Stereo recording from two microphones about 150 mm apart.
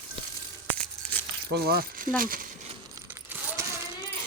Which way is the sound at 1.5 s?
90° right.